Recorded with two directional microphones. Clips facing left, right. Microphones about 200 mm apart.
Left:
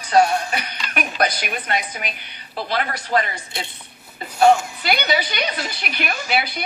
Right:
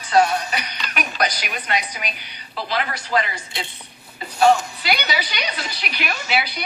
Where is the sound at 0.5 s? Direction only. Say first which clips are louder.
Left 1 dB; 50° left (ahead or behind).